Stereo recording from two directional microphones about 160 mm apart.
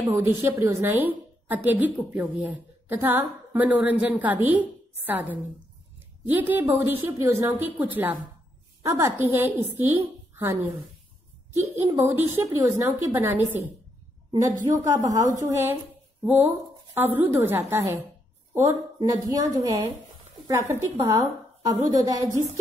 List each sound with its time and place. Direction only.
0.0 s a woman's voice: 15° right (ahead or behind)
14.7 s a woman's voice: 15° right (ahead or behind)